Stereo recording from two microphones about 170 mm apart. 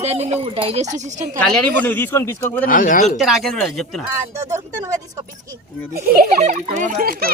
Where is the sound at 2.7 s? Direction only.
55° left (ahead or behind).